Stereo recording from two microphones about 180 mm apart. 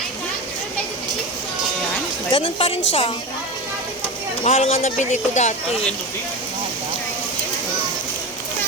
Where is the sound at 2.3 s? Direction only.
30° left (ahead or behind).